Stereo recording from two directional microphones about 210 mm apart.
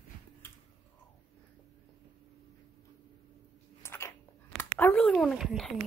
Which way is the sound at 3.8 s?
10° left (ahead or behind).